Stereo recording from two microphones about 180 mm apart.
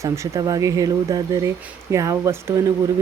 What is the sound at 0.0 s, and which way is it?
Speech, 20° right (ahead or behind).